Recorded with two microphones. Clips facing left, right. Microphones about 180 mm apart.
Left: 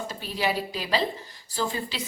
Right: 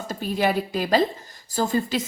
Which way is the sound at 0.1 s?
50° right (ahead or behind).